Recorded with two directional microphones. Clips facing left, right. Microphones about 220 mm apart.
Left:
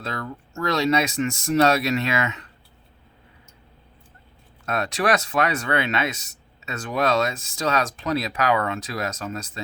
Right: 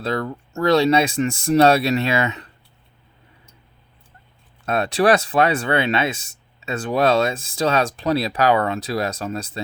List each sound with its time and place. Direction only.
0.0 s speech: 35° right (ahead or behind)
4.6 s speech: 30° right (ahead or behind)